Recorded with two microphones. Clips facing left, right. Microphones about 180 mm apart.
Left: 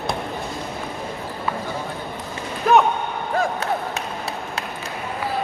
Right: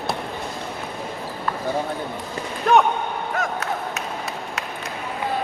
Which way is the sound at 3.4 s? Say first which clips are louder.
Left 5 dB; 30° left (ahead or behind).